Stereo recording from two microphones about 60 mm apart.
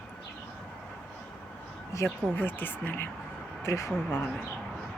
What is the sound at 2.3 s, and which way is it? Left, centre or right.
Speech, left.